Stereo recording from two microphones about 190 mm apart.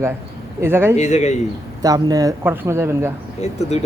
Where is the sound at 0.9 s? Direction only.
35° left (ahead or behind).